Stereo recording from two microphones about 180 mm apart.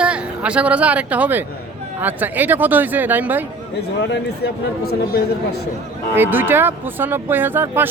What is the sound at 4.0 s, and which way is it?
Speech, 70° left (ahead or behind).